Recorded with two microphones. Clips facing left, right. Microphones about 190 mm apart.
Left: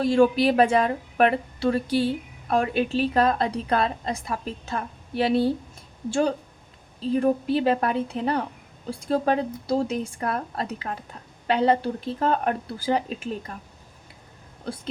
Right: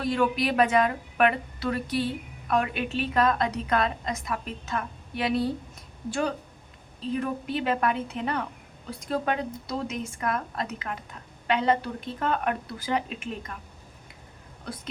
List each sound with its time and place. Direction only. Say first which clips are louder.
0.0 s speech: left 7 dB; 30° left (ahead or behind)